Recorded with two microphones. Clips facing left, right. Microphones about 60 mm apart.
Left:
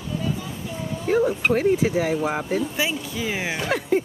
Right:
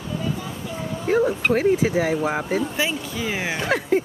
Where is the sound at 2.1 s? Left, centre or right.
Centre.